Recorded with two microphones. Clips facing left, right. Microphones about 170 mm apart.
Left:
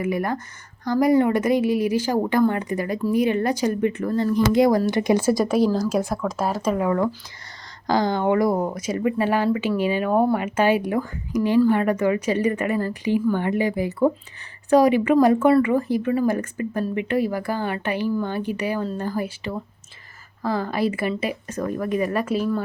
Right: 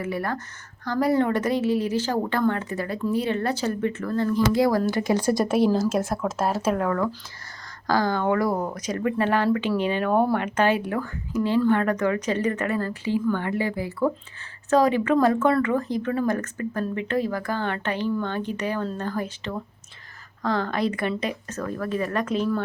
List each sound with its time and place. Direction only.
0.0 s speech: 15° left (ahead or behind)
5.2 s speech: centre (ahead or behind)
6.8 s speech: 20° left (ahead or behind)